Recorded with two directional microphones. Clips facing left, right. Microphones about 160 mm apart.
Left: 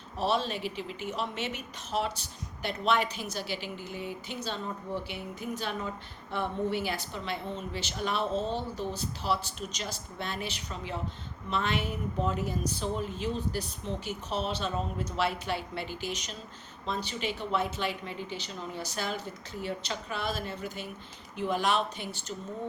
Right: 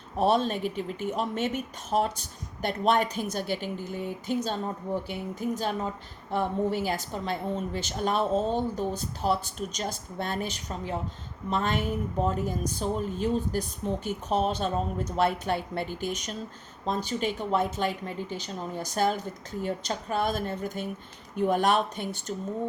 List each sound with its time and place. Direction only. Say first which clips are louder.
0.2 s a woman's voice: right 5 dB; 50° right (ahead or behind)